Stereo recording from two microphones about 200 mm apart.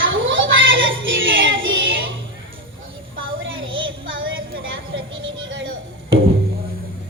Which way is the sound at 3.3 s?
75° right (ahead or behind).